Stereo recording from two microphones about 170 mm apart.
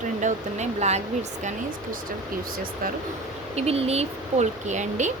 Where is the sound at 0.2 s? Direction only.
45° right (ahead or behind).